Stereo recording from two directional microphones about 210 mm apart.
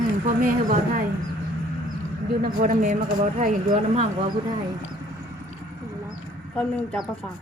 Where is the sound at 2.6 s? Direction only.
40° right (ahead or behind).